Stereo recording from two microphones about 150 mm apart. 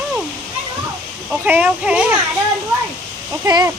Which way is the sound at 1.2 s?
10° right (ahead or behind).